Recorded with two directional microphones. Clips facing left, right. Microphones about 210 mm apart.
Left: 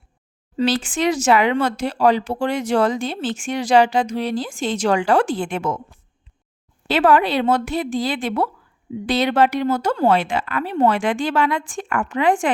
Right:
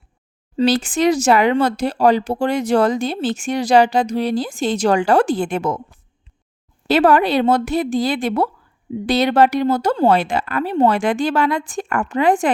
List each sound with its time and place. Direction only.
0.5 s speech: 40° right (ahead or behind)
6.8 s speech: 40° right (ahead or behind)